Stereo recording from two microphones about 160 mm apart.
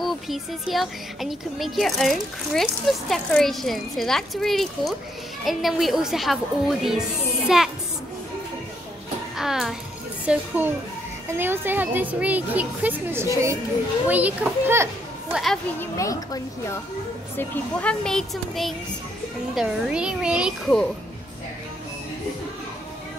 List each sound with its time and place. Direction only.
0.0 s a child's voice: centre (ahead or behind)
9.4 s a child's voice: centre (ahead or behind)
15.3 s a child's voice: centre (ahead or behind)
15.8 s a woman's voice: 20° left (ahead or behind)
17.4 s a child's voice: 10° left (ahead or behind)